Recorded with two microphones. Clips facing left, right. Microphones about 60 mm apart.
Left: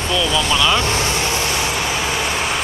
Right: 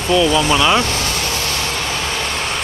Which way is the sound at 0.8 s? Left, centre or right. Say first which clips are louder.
Left 1 dB; left.